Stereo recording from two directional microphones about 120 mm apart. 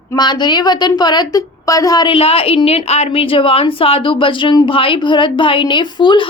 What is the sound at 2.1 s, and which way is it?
A woman's voice, 55° left (ahead or behind).